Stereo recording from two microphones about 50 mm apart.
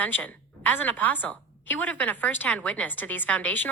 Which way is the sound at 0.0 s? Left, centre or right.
Left.